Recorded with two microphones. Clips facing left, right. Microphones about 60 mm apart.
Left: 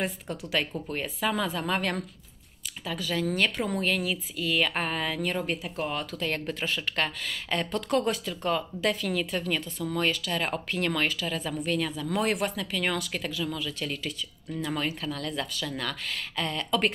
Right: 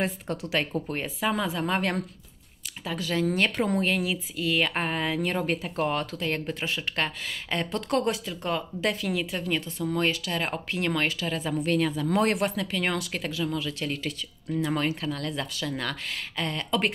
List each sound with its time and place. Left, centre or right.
0.5 s speech: right
2.8 s speech: right
5.3 s speech: right
6.1 s speech: centre
11.1 s speech: right
11.6 s speech: right